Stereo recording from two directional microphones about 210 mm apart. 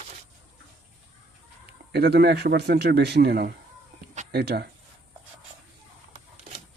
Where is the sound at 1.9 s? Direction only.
50° right (ahead or behind).